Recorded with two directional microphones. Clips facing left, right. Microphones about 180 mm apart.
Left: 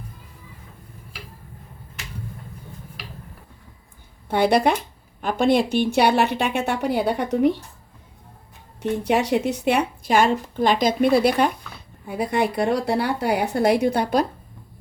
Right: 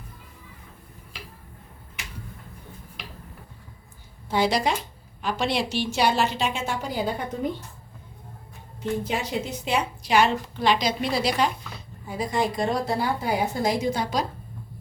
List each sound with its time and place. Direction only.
4.3 s speech: 60° left (ahead or behind); by 7.6 s 75° left (ahead or behind)
8.8 s speech: 70° left (ahead or behind)